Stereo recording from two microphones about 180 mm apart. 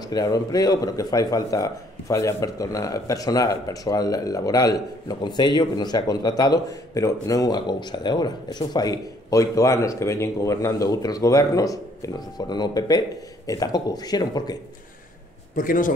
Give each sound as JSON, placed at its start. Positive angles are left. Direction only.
{"t": 0.0, "sound": "speech", "side_deg": 20}
{"t": 15.5, "sound": "a man's voice", "side_deg": 50}